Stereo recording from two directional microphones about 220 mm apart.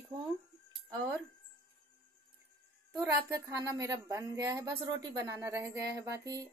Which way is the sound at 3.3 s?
15° right (ahead or behind).